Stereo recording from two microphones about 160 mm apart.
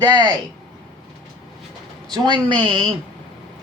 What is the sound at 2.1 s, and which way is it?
Speech, 30° right (ahead or behind).